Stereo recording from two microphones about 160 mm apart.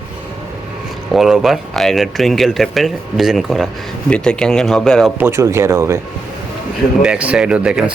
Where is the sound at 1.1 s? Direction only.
5° right (ahead or behind).